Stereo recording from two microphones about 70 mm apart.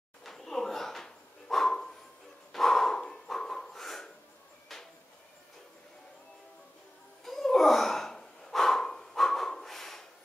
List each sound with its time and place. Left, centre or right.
0.2 s dog: centre
2.5 s a sound: centre
7.2 s gasp: centre